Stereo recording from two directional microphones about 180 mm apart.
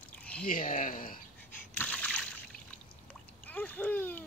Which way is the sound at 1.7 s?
10° left (ahead or behind).